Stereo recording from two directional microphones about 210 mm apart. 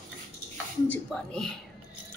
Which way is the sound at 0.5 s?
5° left (ahead or behind).